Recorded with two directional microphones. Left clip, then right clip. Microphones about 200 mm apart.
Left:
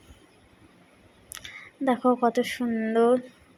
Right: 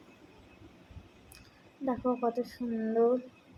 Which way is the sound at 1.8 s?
40° left (ahead or behind).